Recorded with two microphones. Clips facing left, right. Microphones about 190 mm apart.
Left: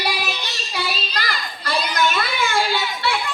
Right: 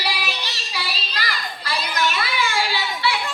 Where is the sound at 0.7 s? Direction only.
50° left (ahead or behind).